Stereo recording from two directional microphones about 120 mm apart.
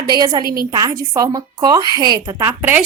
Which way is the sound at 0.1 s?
35° right (ahead or behind).